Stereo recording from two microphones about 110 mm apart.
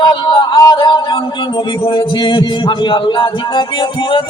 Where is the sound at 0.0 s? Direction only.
45° left (ahead or behind).